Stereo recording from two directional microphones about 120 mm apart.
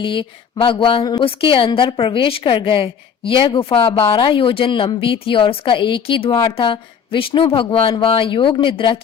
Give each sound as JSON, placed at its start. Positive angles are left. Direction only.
{"t": 0.0, "sound": "a woman's voice", "side_deg": 45}